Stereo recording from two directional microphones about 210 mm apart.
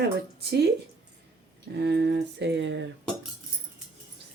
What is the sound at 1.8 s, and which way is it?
Speech, 50° right (ahead or behind).